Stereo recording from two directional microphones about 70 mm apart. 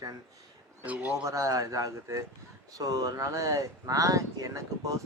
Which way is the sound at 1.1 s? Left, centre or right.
Right.